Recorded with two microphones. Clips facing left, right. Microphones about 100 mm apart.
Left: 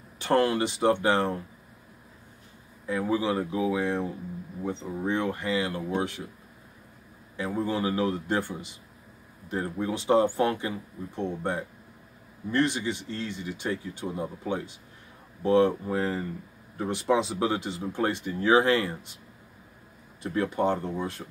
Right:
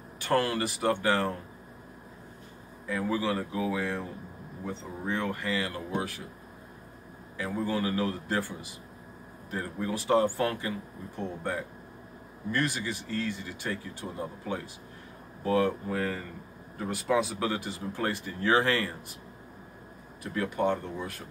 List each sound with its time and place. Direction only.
0.2 s speech: 25° left (ahead or behind)
2.9 s speech: 20° left (ahead or behind)
7.3 s speech: 20° left (ahead or behind)
12.4 s speech: 25° left (ahead or behind)
20.2 s speech: 30° left (ahead or behind)